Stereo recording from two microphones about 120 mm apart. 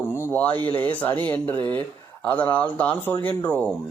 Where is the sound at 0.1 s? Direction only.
20° left (ahead or behind).